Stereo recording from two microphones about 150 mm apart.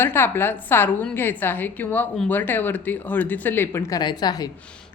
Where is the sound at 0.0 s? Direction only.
15° left (ahead or behind).